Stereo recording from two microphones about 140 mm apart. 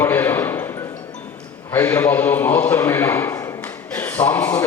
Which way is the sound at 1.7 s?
15° left (ahead or behind).